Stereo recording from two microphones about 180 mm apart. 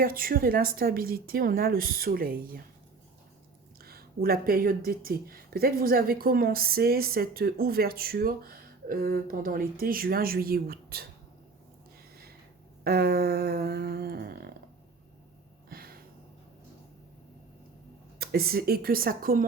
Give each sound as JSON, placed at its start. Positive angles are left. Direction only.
{"t": 0.0, "sound": "speech", "side_deg": -55}
{"t": 3.8, "sound": "speech", "side_deg": -60}
{"t": 12.8, "sound": "speech", "side_deg": -60}
{"t": 15.7, "sound": "a sound", "side_deg": -55}
{"t": 18.2, "sound": "speech", "side_deg": -60}